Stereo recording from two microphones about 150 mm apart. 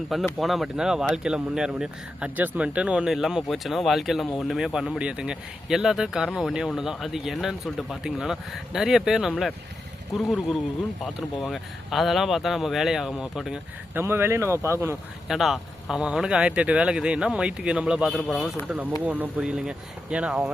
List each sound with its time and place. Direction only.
0.3 s speech: centre (ahead or behind)
13.9 s speech: 15° right (ahead or behind)
15.3 s speech: centre (ahead or behind)
19.0 s speech: 10° right (ahead or behind)